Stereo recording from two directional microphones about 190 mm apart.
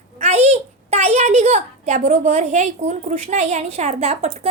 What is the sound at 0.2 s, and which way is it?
A child's voice, 35° right (ahead or behind).